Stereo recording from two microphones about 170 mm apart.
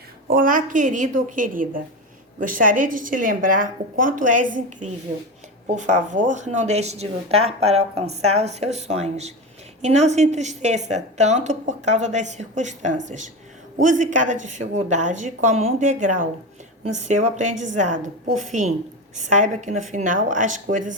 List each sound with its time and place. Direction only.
0.3 s a woman's voice: 55° right (ahead or behind)